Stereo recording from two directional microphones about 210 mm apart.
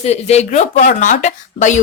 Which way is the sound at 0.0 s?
30° left (ahead or behind).